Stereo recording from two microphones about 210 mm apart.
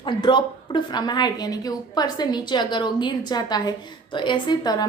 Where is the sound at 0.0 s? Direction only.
20° left (ahead or behind).